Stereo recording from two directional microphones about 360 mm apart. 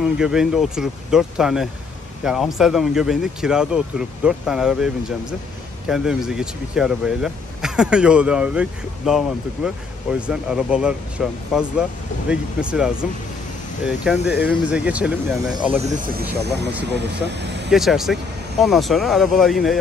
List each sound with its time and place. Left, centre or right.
0.0 s speech: centre
10.2 s speech: centre
15.8 s speech: right
17.6 s speech: centre